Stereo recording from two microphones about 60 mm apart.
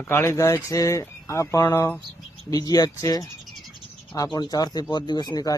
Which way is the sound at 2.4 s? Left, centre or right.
Left.